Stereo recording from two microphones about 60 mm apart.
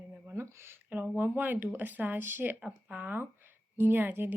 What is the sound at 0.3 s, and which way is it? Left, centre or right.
Speech, right.